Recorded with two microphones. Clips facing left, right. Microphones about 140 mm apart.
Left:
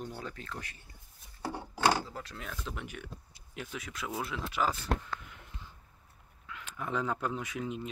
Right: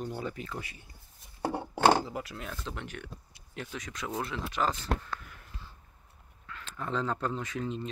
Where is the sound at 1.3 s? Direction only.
55° right (ahead or behind).